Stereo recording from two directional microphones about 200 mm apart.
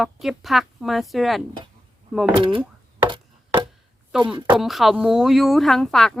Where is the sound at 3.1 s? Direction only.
25° right (ahead or behind).